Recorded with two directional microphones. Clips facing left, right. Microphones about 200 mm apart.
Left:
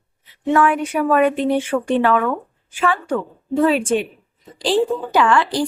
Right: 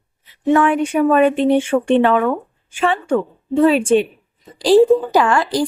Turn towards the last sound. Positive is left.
turn(degrees=-40)  # may be behind; listen again after turning